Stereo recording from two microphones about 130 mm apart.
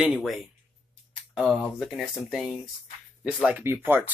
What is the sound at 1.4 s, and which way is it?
Speech, centre (ahead or behind).